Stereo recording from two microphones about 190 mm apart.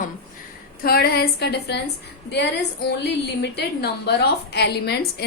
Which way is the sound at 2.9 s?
60° left (ahead or behind).